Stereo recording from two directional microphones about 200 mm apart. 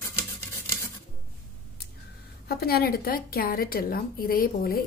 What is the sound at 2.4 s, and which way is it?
A woman's voice, 50° left (ahead or behind).